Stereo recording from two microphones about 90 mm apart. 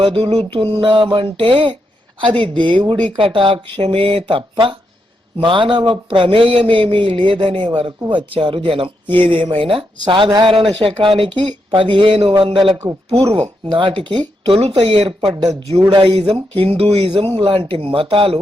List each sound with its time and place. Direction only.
0.0 s speech: 80° right
2.2 s speech: 65° right (ahead or behind)
3.2 s speech: 75° right (ahead or behind); by 9.1 s 90° right
9.2 s speech: 70° right (ahead or behind)
10.4 s speech: 75° right (ahead or behind)
11.2 s speech: 60° right (ahead or behind)
15.3 s speech: 50° right (ahead or behind)
15.9 s speech: 65° right (ahead or behind)
16.6 s speech: 90° right